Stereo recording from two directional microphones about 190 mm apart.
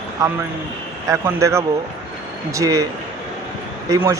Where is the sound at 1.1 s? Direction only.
15° right (ahead or behind).